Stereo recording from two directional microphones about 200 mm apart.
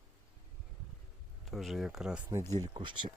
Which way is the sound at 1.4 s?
Centre (ahead or behind).